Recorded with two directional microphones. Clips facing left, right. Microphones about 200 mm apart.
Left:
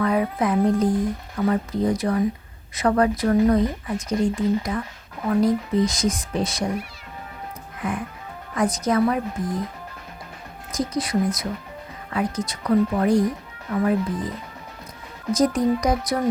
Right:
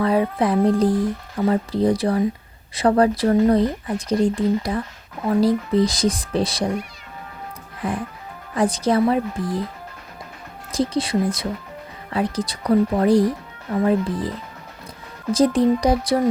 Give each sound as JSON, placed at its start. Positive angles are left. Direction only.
{"t": 0.0, "sound": "speech", "side_deg": -30}
{"t": 7.8, "sound": "speech", "side_deg": -35}
{"t": 10.7, "sound": "speech", "side_deg": -30}